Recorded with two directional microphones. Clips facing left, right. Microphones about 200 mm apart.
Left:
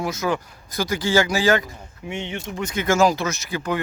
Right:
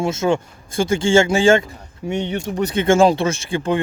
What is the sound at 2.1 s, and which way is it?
Speech, 40° right (ahead or behind).